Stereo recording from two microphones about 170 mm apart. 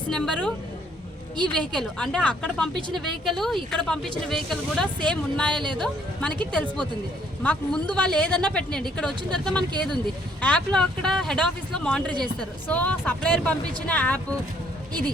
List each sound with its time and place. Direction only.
0.1 s speech: 5° left (ahead or behind)
1.5 s speech: 5° left (ahead or behind)